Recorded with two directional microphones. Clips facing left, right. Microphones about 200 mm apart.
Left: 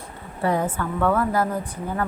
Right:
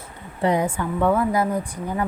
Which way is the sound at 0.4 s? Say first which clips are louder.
Right 2 dB; 15° right (ahead or behind).